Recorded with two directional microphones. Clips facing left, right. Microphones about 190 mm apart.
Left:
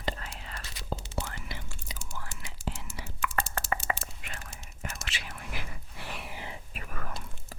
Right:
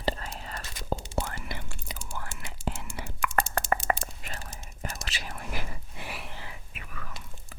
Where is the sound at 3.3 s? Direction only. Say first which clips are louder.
Right 5 dB; 35° left (ahead or behind).